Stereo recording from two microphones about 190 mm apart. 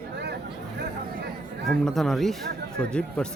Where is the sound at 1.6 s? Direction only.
Centre (ahead or behind).